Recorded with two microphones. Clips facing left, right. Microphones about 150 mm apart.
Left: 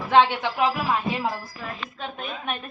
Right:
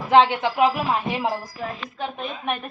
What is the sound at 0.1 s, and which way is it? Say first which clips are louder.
Speech: right 2 dB; 20° right (ahead or behind).